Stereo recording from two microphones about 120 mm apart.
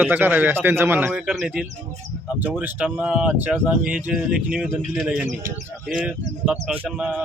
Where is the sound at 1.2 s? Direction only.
5° right (ahead or behind).